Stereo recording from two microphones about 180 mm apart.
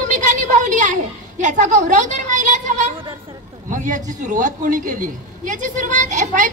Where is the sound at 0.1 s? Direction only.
45° right (ahead or behind).